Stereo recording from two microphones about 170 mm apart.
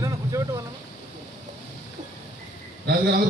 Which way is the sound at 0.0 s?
20° right (ahead or behind).